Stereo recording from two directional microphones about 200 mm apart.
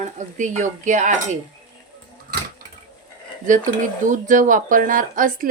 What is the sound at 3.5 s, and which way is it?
Speech, 40° right (ahead or behind).